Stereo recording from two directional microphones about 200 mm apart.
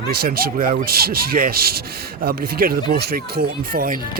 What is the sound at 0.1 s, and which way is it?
Speech, 50° right (ahead or behind).